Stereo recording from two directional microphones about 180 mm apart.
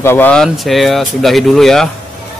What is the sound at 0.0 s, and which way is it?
Speech, 10° left (ahead or behind).